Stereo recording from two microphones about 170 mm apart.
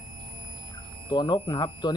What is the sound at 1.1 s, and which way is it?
Speech, 30° left (ahead or behind).